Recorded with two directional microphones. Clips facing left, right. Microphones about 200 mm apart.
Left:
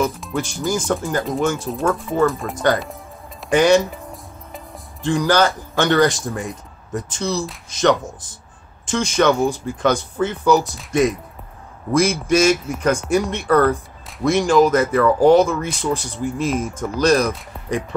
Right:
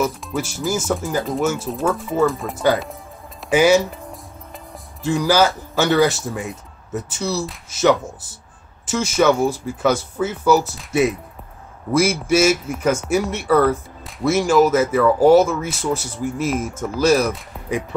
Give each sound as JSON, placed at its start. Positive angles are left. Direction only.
{"t": 0.0, "sound": "speech", "side_deg": -5}
{"t": 5.0, "sound": "a man's voice", "side_deg": -5}